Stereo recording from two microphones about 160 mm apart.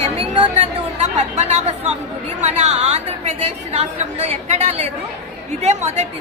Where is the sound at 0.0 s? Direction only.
40° right (ahead or behind).